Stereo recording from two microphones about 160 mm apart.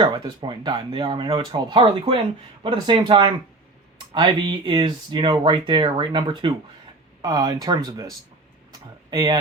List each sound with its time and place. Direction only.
0.0 s speech: 30° right (ahead or behind)